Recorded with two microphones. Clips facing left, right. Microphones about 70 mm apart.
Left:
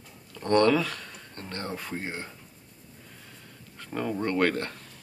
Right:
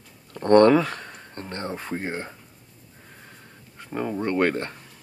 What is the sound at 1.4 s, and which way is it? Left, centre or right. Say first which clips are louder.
Speech: right 3 dB; right.